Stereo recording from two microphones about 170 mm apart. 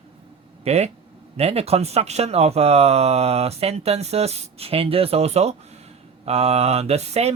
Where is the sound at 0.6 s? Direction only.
40° right (ahead or behind).